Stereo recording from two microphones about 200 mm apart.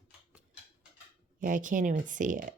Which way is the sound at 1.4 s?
40° right (ahead or behind).